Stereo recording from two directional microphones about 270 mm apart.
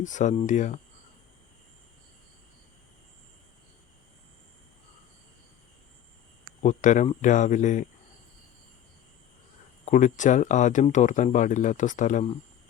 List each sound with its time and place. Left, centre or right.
0.0 s speech: left
6.6 s speech: left
9.8 s speech: left